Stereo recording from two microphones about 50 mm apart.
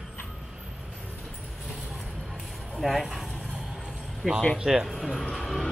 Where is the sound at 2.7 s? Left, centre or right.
Centre.